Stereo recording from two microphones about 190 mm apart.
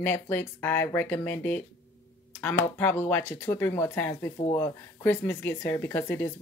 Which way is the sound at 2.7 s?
10° left (ahead or behind).